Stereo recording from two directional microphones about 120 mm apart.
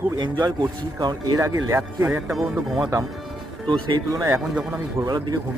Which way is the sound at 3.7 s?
40° right (ahead or behind).